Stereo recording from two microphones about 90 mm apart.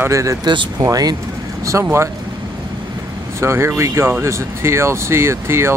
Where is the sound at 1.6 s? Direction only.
30° right (ahead or behind).